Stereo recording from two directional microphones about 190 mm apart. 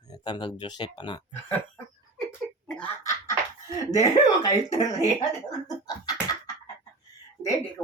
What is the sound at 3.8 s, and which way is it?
Speech, 20° left (ahead or behind).